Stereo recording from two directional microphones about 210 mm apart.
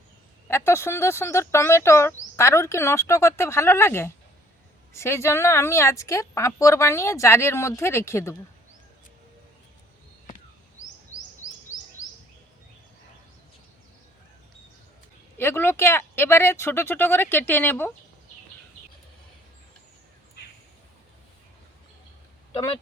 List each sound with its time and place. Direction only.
0.4 s speech: 10° left (ahead or behind)
15.4 s speech: 10° left (ahead or behind)